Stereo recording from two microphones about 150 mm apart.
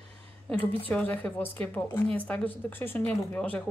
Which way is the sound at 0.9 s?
10° left (ahead or behind).